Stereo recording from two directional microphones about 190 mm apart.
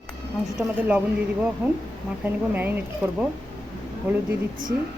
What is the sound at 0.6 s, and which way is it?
Speech, 10° right (ahead or behind).